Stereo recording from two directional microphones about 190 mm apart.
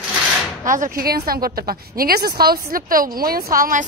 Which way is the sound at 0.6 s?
45° right (ahead or behind).